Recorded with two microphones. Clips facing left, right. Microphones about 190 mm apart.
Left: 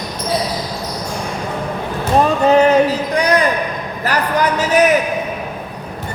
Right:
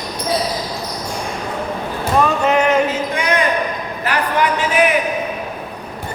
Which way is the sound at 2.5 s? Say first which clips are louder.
Left 4 dB; 35° left (ahead or behind).